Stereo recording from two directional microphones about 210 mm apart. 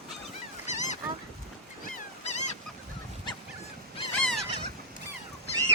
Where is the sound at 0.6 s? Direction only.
35° left (ahead or behind).